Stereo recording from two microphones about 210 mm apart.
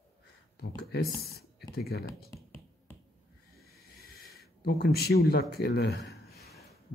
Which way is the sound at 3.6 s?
50° left (ahead or behind).